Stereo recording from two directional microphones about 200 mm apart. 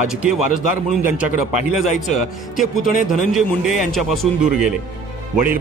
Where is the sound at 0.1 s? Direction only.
5° right (ahead or behind).